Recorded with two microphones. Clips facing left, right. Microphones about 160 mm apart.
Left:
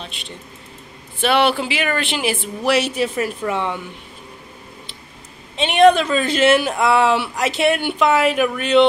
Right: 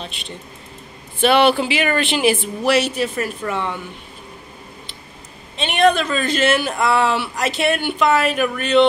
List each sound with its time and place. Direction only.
1.2 s speech: 5° left (ahead or behind)
2.7 s a man's voice: 15° left (ahead or behind)
5.6 s a man's voice: 20° left (ahead or behind)